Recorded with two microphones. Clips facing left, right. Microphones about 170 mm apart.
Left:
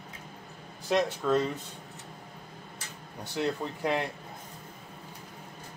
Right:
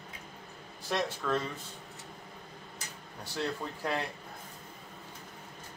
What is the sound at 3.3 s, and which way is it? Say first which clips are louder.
Speech: left 4 dB; 20° left (ahead or behind).